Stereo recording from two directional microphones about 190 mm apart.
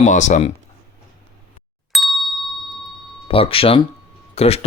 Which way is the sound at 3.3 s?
30° left (ahead or behind).